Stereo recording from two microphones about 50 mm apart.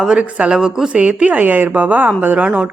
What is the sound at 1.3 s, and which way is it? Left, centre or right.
A woman's voice, right.